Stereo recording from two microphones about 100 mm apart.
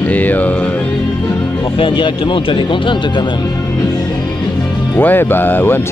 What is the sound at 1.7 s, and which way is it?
Speech, 55° left (ahead or behind).